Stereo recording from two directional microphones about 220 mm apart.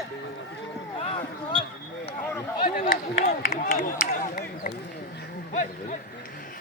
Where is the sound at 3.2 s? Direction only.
35° left (ahead or behind).